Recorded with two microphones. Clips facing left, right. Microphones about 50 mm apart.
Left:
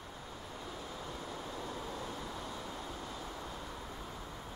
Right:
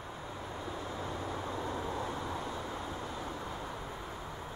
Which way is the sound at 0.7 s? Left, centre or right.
Right.